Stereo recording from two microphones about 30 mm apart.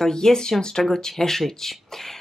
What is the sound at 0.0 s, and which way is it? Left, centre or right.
Speech, centre.